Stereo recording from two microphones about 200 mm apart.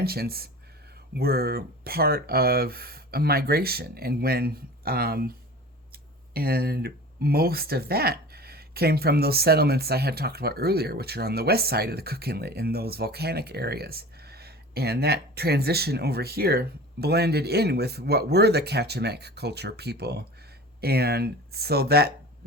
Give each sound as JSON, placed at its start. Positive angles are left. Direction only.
{"t": 0.0, "sound": "speech", "side_deg": -50}
{"t": 6.3, "sound": "speech", "side_deg": -50}